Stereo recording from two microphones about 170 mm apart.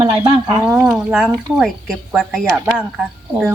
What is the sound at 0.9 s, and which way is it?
Speech, 5° right (ahead or behind).